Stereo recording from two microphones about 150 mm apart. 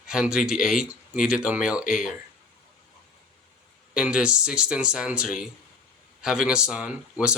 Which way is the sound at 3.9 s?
5° right (ahead or behind).